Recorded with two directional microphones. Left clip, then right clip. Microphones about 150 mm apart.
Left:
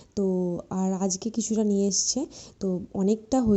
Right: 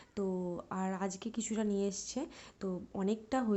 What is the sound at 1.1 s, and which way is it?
A woman's voice, 35° left (ahead or behind).